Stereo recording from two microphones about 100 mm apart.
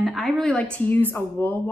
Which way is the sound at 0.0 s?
Centre (ahead or behind).